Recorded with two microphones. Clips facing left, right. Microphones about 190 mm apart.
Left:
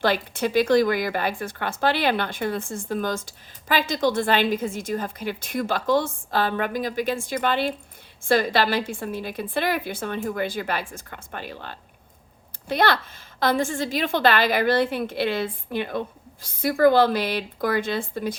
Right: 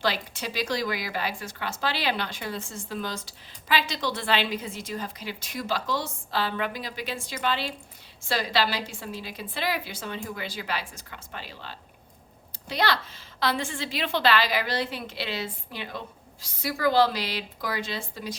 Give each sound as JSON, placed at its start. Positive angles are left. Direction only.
{"t": 0.0, "sound": "a woman's voice", "side_deg": 55}